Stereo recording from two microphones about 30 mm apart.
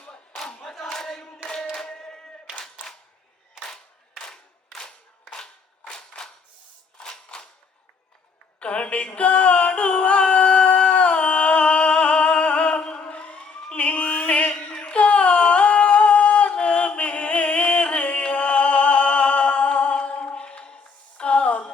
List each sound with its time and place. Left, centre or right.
0.3 s crowd: centre
1.7 s singing: left
5.9 s choir: centre
7.3 s a sound: left
8.5 s a sound: left
13.7 s music: left
14.6 s humming: left
20.7 s music: left